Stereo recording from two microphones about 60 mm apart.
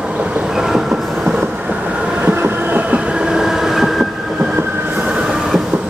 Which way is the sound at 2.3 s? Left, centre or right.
Right.